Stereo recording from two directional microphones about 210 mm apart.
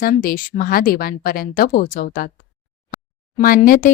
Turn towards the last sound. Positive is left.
turn(degrees=40)  # may be behind; listen again after turning